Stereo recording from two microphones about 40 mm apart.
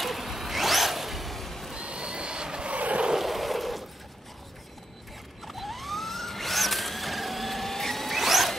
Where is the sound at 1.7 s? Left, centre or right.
Right.